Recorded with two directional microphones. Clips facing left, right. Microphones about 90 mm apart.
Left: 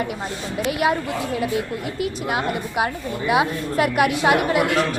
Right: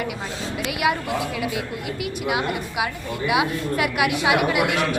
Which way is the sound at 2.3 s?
40° left (ahead or behind).